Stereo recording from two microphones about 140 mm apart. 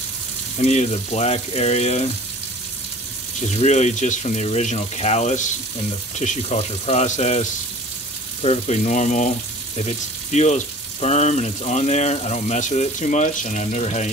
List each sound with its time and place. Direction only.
0.6 s speech: 55° left (ahead or behind)
3.3 s speech: 55° left (ahead or behind)